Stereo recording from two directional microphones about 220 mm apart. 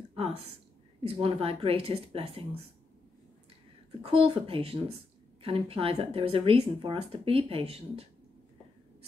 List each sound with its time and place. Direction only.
0.1 s a sound: 25° right (ahead or behind)
1.0 s speech: 25° right (ahead or behind)
4.0 s speech: 25° right (ahead or behind)